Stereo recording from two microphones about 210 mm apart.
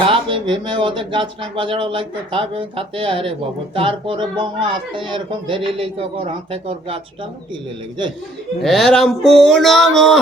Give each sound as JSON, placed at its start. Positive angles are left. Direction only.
{"t": 0.0, "sound": "speech", "side_deg": -25}
{"t": 8.6, "sound": "speech", "side_deg": 0}